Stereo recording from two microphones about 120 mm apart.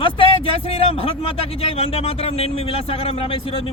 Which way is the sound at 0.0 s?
50° left (ahead or behind).